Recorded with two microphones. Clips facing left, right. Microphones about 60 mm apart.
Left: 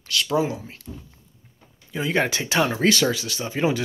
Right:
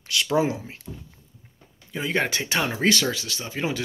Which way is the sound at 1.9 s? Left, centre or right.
Centre.